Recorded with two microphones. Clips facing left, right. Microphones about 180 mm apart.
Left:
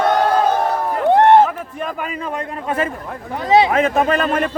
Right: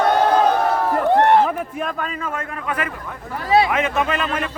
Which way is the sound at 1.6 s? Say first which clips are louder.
Right 1 dB; 5° right (ahead or behind).